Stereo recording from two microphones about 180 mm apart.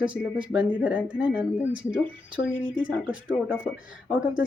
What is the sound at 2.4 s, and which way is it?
Speech, 50° left (ahead or behind).